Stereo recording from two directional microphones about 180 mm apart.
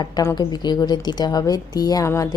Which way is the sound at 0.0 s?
20° left (ahead or behind).